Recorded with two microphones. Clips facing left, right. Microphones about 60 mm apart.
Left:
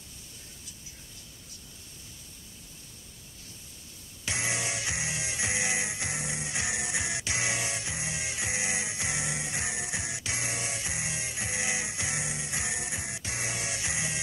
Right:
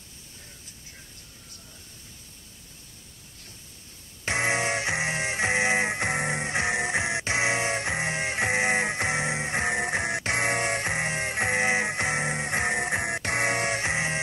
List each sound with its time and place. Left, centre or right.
4.2 s music: right